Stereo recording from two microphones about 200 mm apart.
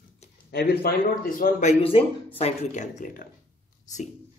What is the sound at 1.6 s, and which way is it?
Speech, 30° left (ahead or behind).